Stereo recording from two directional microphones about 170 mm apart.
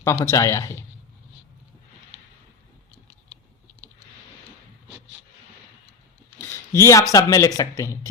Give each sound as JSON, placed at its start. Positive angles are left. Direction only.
{"t": 0.0, "sound": "speech", "side_deg": 15}
{"t": 6.4, "sound": "a sound", "side_deg": 15}
{"t": 7.1, "sound": "speech", "side_deg": 20}